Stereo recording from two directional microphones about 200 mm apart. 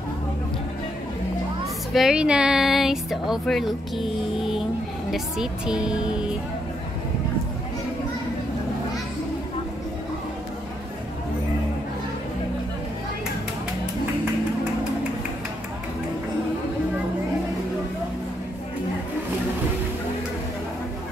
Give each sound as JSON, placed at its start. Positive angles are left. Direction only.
{"t": 2.0, "sound": "speech", "side_deg": -5}